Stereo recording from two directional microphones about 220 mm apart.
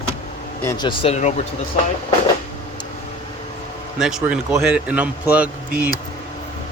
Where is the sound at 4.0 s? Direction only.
Centre (ahead or behind).